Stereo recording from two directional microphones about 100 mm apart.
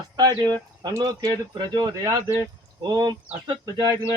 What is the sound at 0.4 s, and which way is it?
Speech, 45° right (ahead or behind).